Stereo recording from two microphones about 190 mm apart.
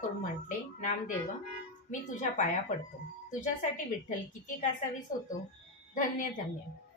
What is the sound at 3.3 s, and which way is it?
Speech, 40° left (ahead or behind).